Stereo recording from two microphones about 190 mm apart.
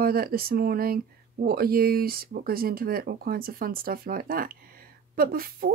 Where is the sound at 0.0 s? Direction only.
50° right (ahead or behind).